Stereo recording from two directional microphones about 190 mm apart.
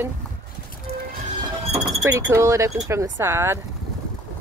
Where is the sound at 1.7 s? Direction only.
15° right (ahead or behind).